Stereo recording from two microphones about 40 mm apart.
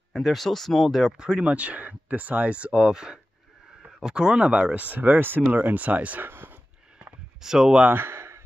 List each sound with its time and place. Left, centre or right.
0.1 s speech: centre
0.8 s speech: centre
1.1 s speech: right
4.9 s speech: right
6.2 s a sound: right
7.4 s speech: centre
7.9 s a sound: right